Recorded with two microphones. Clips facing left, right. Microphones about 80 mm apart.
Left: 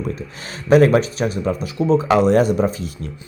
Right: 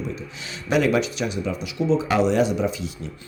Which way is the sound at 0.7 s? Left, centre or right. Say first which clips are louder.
Left 7 dB; left.